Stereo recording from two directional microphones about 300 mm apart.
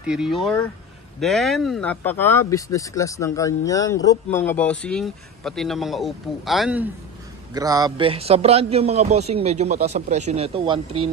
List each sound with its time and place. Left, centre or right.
0.0 s a man's voice: centre